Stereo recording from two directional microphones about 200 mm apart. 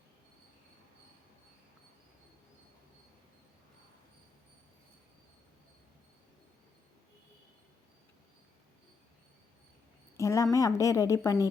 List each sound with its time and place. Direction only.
10.2 s a woman's voice: 15° left (ahead or behind)